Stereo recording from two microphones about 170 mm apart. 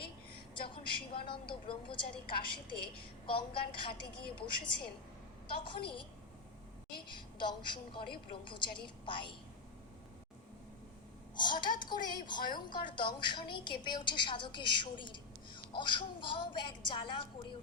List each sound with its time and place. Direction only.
0.6 s a sound: 30° left (ahead or behind)
1.3 s a woman's voice: 30° left (ahead or behind)
11.3 s a woman's voice: 25° left (ahead or behind)